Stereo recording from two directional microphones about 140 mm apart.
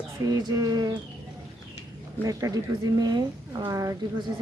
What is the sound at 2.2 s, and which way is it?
A woman's voice, 25° right (ahead or behind).